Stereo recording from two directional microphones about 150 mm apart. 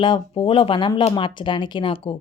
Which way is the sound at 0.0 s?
35° left (ahead or behind).